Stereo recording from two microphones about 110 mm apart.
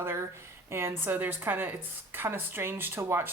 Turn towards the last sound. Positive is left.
turn(degrees=-20)  # may be behind; listen again after turning